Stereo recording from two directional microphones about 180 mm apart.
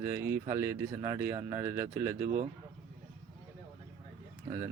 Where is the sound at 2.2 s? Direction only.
45° right (ahead or behind).